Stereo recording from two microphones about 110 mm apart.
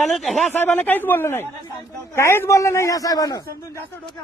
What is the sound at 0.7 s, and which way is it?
A man's voice, 15° left (ahead or behind).